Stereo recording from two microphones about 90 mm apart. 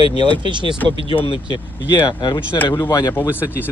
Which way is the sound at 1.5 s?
60° left (ahead or behind).